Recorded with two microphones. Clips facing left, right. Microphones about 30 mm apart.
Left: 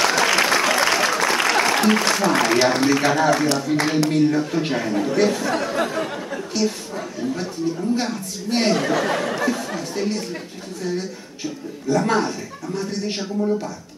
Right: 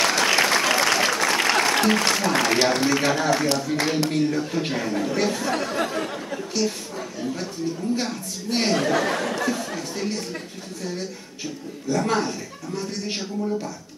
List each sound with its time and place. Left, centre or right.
0.0 s applause: centre
2.7 s speech: centre
7.9 s speech: centre
13.4 s a woman's voice: centre